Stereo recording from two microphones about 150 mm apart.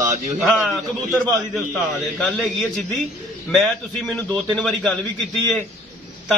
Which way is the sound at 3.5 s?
Centre (ahead or behind).